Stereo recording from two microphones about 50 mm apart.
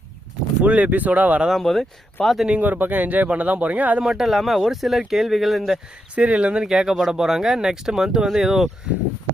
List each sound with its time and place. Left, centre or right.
0.6 s speech: right
1.6 s speech: centre
2.5 s speech: right
4.0 s speech: centre
6.1 s speech: right; by 8.7 s centre